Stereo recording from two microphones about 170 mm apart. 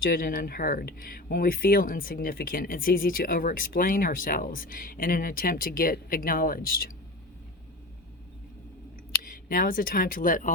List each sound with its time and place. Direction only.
0.0 s speech: 60° left (ahead or behind)
9.2 s speech: 55° left (ahead or behind)